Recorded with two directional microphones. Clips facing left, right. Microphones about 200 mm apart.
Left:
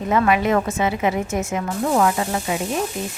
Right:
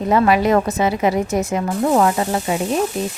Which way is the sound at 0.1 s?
35° right (ahead or behind).